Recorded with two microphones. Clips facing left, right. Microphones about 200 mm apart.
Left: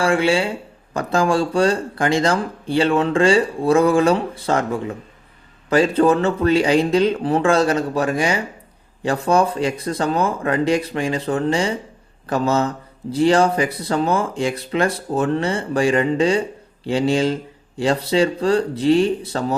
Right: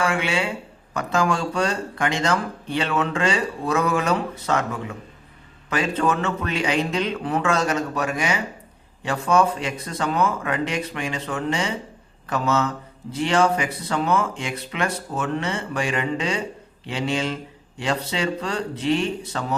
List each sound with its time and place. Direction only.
0.0 s speech: 35° left (ahead or behind)